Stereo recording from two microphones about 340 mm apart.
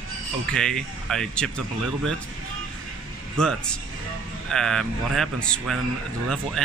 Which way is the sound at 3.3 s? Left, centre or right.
Centre.